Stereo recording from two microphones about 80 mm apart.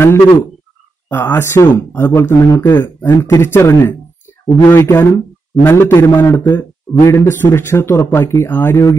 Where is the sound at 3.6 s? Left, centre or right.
Left.